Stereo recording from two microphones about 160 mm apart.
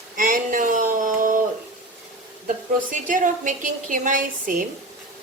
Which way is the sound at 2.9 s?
55° right (ahead or behind).